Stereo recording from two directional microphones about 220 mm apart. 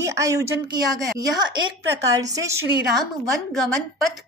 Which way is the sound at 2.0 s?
15° right (ahead or behind).